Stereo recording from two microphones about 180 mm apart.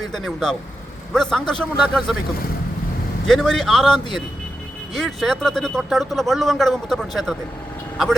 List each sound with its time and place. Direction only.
0.1 s speech: centre (ahead or behind)
3.2 s speech: centre (ahead or behind)